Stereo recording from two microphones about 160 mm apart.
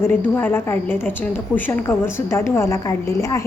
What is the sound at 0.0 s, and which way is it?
A woman's voice, 15° left (ahead or behind).